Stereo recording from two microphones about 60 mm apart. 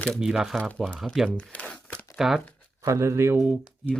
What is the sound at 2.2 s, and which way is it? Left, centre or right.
Speech, centre.